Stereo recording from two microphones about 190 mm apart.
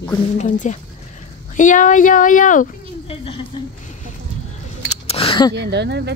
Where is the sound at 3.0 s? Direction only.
30° left (ahead or behind).